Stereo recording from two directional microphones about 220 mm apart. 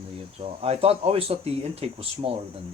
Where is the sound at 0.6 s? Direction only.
25° right (ahead or behind).